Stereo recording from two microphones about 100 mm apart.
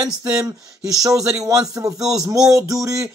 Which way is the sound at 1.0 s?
30° right (ahead or behind).